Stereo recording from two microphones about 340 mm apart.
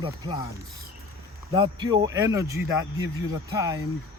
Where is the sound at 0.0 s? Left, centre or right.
Centre.